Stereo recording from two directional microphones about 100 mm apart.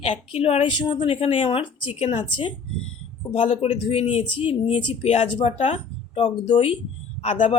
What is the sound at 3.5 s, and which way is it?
Speech, 90° left.